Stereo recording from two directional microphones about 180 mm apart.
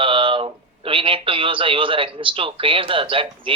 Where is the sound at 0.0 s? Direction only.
30° right (ahead or behind).